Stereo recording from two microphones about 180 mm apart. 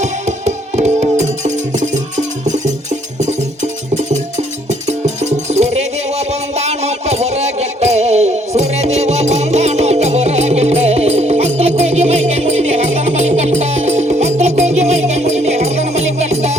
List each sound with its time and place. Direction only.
0.0 s music: 40° right (ahead or behind)